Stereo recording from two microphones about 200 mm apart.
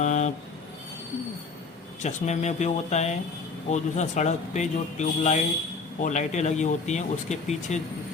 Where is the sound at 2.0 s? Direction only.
35° left (ahead or behind).